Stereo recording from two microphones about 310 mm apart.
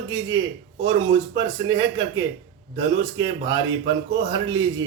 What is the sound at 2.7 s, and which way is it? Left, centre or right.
Mantra, centre.